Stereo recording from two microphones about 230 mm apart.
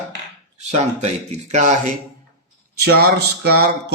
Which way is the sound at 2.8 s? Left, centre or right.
Right.